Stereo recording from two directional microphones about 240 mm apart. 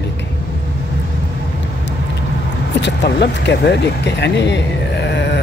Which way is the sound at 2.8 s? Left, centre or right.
Left.